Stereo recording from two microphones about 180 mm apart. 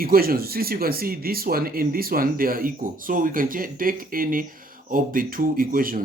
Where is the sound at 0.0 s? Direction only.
55° right (ahead or behind).